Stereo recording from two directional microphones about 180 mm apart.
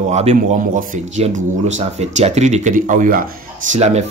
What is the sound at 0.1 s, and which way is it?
A man's voice, 40° right (ahead or behind).